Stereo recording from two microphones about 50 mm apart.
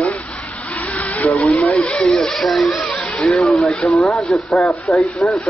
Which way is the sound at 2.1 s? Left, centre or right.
Centre.